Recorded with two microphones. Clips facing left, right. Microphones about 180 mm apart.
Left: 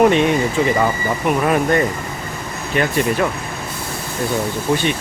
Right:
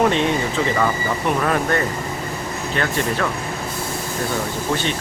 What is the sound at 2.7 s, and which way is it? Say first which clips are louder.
Speech: left 5 dB; 15° left (ahead or behind).